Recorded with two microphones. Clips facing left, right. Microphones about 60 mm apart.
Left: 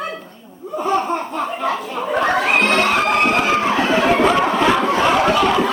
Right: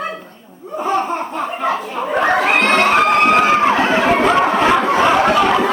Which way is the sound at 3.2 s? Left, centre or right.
Right.